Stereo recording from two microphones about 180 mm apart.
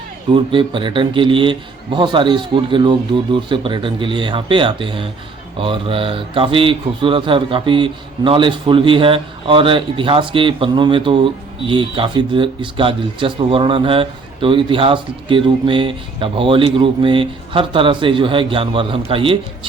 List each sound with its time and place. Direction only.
0.3 s a man's voice: 30° right (ahead or behind)